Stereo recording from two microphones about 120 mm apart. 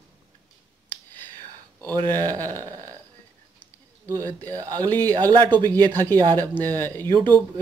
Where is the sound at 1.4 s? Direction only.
30° right (ahead or behind).